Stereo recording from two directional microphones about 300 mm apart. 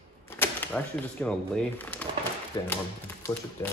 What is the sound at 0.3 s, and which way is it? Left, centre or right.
Speech, centre.